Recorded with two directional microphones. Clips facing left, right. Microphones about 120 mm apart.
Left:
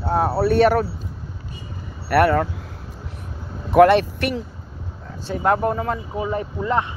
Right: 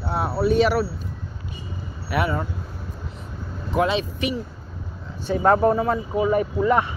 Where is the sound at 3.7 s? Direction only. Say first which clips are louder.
Left 9 dB; 65° left (ahead or behind).